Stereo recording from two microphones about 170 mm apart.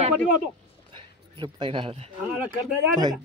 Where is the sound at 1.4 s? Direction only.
30° right (ahead or behind).